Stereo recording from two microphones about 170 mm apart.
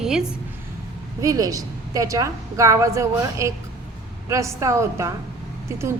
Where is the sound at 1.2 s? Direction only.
20° right (ahead or behind).